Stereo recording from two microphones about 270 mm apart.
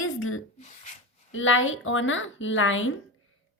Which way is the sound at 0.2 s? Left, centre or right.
Left.